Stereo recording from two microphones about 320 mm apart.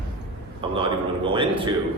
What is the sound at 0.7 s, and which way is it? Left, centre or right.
A man's voice, centre.